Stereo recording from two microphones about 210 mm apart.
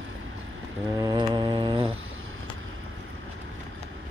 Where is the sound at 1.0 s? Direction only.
20° right (ahead or behind).